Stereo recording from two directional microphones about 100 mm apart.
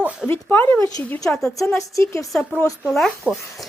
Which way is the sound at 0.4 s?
20° left (ahead or behind).